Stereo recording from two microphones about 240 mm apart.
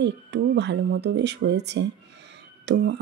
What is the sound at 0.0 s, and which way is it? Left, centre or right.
Speech, right.